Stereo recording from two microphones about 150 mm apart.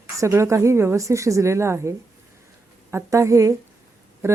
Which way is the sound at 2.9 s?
20° right (ahead or behind).